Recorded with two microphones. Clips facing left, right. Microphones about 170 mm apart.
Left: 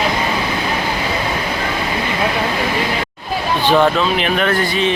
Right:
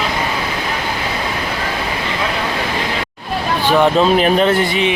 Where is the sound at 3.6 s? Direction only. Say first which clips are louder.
Even; 10° right (ahead or behind).